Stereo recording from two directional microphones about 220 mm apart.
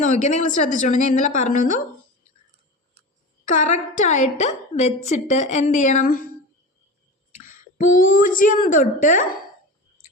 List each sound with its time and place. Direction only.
0.0 s a woman's voice: 35° left (ahead or behind)
3.4 s a woman's voice: 35° left (ahead or behind)
7.3 s a woman's voice: 35° left (ahead or behind)